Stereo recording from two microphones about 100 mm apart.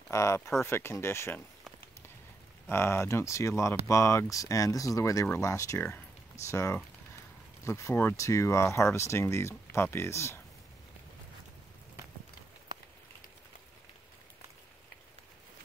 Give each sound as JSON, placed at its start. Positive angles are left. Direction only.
{"t": 0.1, "sound": "speech", "side_deg": 30}
{"t": 2.7, "sound": "speech", "side_deg": 25}